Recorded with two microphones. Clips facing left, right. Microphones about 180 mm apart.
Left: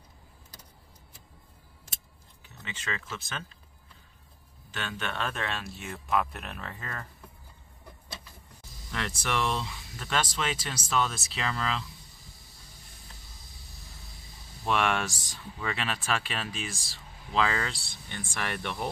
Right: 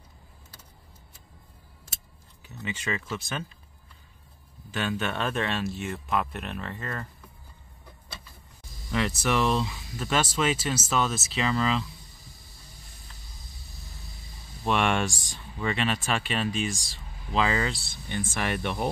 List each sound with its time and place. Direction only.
2.6 s speech: 10° right (ahead or behind)
4.6 s speech: 10° right (ahead or behind)
8.9 s speech: 5° right (ahead or behind)
14.7 s speech: centre (ahead or behind)
16.7 s speech: 20° right (ahead or behind)
17.3 s speech: 5° right (ahead or behind)